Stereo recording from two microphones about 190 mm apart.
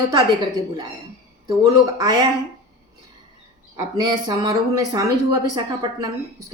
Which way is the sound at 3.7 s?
20° right (ahead or behind).